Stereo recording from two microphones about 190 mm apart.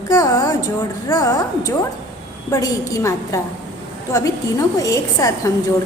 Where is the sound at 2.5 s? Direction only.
15° left (ahead or behind).